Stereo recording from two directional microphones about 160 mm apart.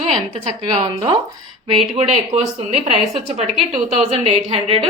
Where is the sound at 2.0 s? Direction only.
45° right (ahead or behind).